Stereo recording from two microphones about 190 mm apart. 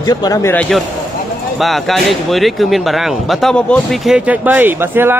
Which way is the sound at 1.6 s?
Centre (ahead or behind).